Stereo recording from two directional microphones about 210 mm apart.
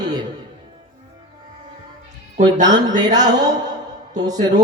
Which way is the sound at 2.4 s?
20° right (ahead or behind).